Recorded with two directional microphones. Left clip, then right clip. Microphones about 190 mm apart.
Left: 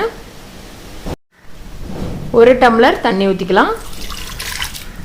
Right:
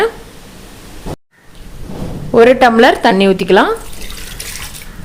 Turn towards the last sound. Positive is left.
turn(degrees=-30)  # may be behind; listen again after turning